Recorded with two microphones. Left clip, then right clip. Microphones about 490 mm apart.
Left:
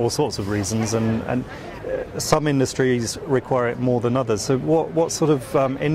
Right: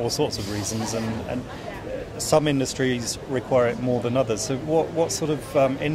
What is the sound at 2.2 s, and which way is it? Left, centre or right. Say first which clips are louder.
Speech: even; left.